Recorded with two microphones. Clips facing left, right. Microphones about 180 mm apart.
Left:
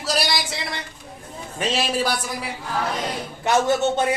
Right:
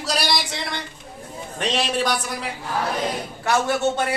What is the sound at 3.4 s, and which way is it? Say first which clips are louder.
Speech: left 2 dB; 20° left (ahead or behind).